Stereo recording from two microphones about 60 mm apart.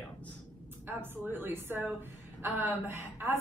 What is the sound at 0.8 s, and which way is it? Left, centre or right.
A woman's voice, right.